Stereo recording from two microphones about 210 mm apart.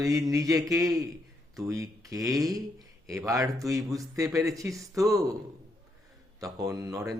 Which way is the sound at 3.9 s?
15° right (ahead or behind).